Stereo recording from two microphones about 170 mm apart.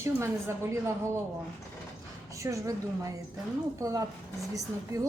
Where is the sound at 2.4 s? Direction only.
20° right (ahead or behind).